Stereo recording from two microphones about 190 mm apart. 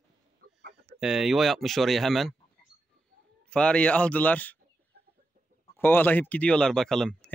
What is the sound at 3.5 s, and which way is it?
Speech, 5° left (ahead or behind).